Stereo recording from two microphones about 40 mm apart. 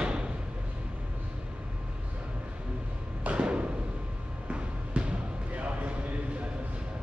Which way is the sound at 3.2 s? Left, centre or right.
Right.